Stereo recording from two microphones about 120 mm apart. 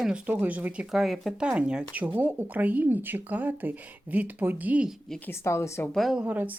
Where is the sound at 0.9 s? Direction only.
Centre (ahead or behind).